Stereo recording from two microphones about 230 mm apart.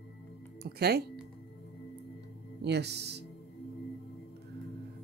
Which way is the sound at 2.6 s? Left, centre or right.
Right.